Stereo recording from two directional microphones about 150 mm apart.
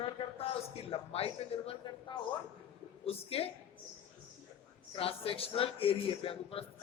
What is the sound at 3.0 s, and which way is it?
Speech, 40° left (ahead or behind).